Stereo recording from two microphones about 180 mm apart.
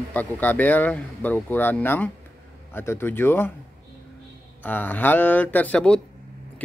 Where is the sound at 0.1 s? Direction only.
10° left (ahead or behind).